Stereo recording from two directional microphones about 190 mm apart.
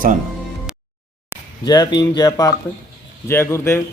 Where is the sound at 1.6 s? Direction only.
20° left (ahead or behind).